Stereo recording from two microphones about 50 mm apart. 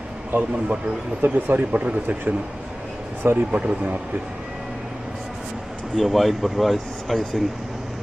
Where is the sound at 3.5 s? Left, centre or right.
Right.